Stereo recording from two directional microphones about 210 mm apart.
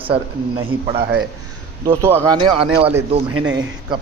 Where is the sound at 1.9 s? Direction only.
10° right (ahead or behind).